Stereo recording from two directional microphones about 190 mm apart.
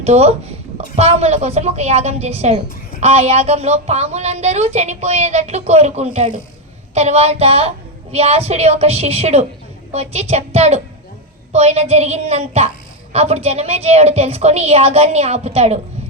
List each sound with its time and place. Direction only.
0.0 s speech: 35° right (ahead or behind)